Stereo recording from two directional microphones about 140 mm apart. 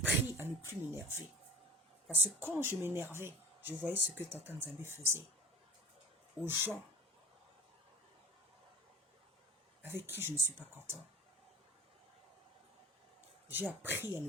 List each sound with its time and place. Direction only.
0.0 s a sound: 15° right (ahead or behind)
2.0 s speech: 10° right (ahead or behind)
6.4 s speech: 10° right (ahead or behind)
9.8 s speech: 15° right (ahead or behind)
13.5 s speech: 15° right (ahead or behind)